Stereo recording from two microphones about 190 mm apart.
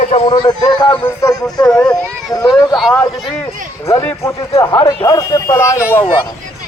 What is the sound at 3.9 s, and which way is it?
Speech, 15° left (ahead or behind).